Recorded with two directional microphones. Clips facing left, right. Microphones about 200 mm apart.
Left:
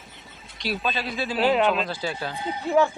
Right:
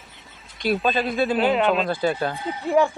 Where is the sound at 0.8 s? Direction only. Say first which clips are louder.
Right 6 dB; 50° right (ahead or behind).